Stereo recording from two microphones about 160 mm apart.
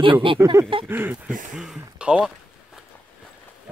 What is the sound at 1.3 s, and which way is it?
Speech, 55° right (ahead or behind).